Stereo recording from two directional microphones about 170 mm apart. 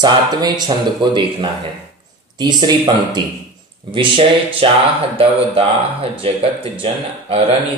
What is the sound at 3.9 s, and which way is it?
Speech, 30° right (ahead or behind).